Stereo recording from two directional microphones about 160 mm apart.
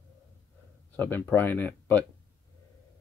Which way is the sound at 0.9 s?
10° left (ahead or behind).